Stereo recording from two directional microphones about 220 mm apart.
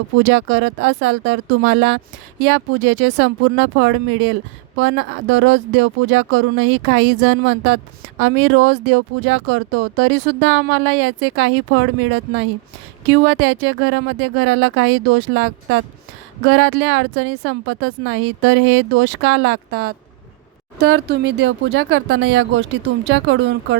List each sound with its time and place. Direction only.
0.3 s speech: 65° right (ahead or behind)